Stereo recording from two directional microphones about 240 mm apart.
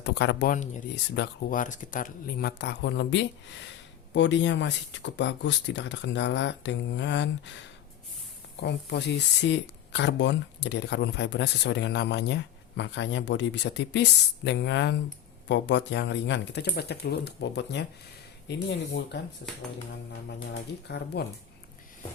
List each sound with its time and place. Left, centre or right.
0.0 s speech: left
8.6 s speech: left
20.5 s speech: left